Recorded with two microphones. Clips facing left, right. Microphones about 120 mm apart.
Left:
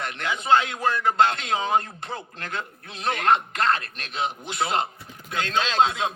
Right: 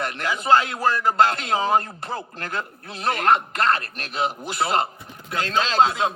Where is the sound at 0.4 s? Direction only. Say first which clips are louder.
Right 2 dB; 40° right (ahead or behind).